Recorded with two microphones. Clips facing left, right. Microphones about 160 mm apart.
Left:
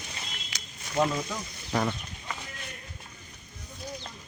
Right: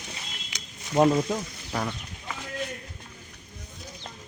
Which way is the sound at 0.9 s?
40° right (ahead or behind).